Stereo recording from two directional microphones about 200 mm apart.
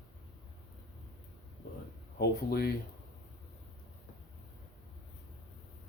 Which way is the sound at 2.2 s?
50° left (ahead or behind).